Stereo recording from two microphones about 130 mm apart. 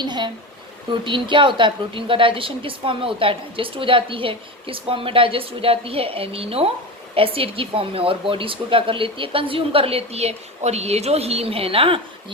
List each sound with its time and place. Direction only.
0.0 s a woman's voice: 35° right (ahead or behind)